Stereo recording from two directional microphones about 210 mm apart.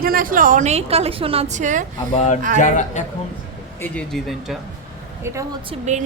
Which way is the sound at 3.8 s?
5° left (ahead or behind).